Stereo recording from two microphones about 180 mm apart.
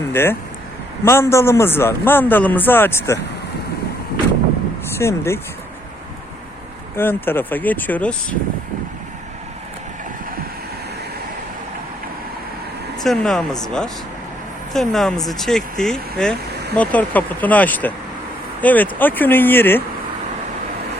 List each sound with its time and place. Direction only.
0.1 s a man's voice: 10° left (ahead or behind)
4.9 s speech: 15° left (ahead or behind)
6.9 s a man's voice: 10° left (ahead or behind)
13.0 s a man's voice: centre (ahead or behind)